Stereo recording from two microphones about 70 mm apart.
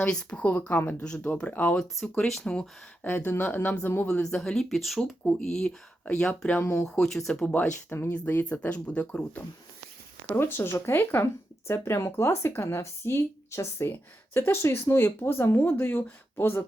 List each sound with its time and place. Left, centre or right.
0.0 s speech: centre
1.8 s speech: centre
3.0 s speech: left
4.2 s speech: centre
6.6 s speech: left
7.0 s speech: centre
7.7 s speech: left
8.4 s speech: left
10.2 s speech: left